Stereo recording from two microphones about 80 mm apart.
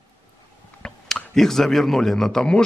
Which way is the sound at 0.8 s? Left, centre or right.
Centre.